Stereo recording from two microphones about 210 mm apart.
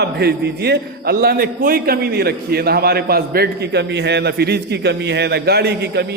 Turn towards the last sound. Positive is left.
turn(degrees=-50)  # may be behind; listen again after turning